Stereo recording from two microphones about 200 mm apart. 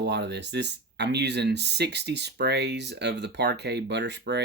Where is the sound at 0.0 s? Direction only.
60° right (ahead or behind).